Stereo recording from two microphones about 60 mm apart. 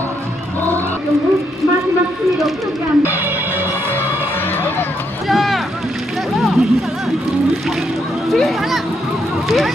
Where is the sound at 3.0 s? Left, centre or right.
Right.